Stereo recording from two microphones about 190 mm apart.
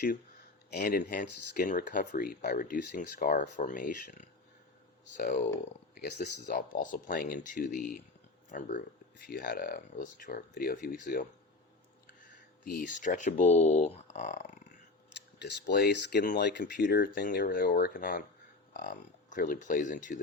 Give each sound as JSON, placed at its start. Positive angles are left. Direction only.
{"t": 0.7, "sound": "speech", "side_deg": 55}
{"t": 5.5, "sound": "speech", "side_deg": 60}
{"t": 12.6, "sound": "speech", "side_deg": 50}
{"t": 15.4, "sound": "speech", "side_deg": 65}